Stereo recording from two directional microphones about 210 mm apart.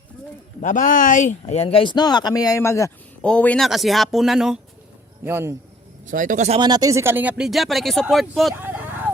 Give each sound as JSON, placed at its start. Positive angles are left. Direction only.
{"t": 0.6, "sound": "a man's voice", "side_deg": 35}
{"t": 6.1, "sound": "speech", "side_deg": -40}
{"t": 6.6, "sound": "speech", "side_deg": -20}
{"t": 8.6, "sound": "a sound", "side_deg": -10}